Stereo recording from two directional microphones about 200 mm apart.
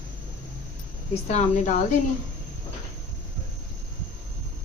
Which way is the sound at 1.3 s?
40° left (ahead or behind).